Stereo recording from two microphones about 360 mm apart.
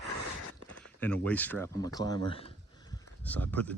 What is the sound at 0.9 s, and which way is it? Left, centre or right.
Speech, centre.